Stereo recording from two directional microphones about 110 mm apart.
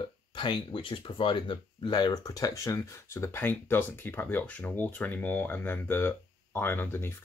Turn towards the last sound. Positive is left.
turn(degrees=20)  # may be behind; listen again after turning